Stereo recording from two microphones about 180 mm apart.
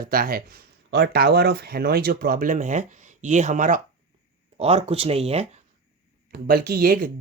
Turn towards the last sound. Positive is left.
turn(degrees=-50)  # may be behind; listen again after turning